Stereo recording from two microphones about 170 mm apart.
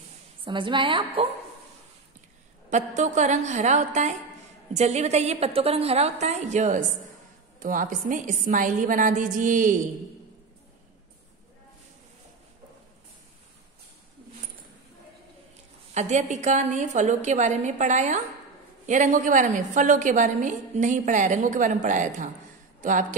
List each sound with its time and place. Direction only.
0.5 s a woman's voice: 30° right (ahead or behind)
2.7 s a woman's voice: 45° right (ahead or behind)
15.9 s a woman's voice: 45° right (ahead or behind)